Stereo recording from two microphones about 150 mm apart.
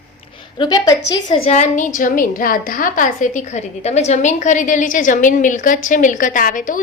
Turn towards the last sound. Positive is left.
turn(degrees=60)  # may be behind; listen again after turning